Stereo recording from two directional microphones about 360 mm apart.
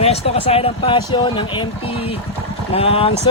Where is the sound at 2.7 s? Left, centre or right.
Centre.